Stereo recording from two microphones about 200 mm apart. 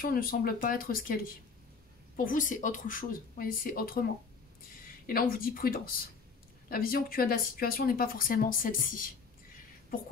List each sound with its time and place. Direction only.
0.0 s speech: 45° left (ahead or behind)
5.0 s speech: 45° left (ahead or behind)